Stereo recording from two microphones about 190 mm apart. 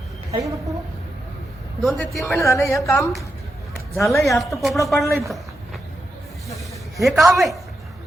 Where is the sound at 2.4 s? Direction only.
15° left (ahead or behind).